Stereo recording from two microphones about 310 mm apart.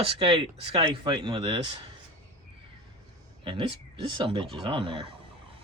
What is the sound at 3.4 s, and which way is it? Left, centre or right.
Speech, centre.